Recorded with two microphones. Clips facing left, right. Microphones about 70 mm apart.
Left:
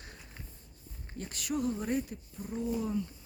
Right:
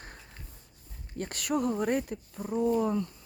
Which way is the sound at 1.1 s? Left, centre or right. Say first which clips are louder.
Right 5 dB; right.